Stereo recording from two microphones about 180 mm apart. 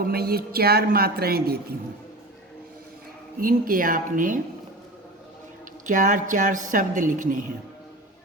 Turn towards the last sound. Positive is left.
turn(degrees=-45)  # may be behind; listen again after turning